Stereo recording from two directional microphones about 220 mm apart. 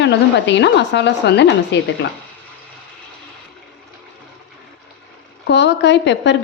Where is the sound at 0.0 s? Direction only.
55° left (ahead or behind).